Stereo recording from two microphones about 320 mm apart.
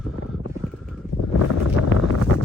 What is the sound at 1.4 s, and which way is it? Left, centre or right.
Wind noise, left.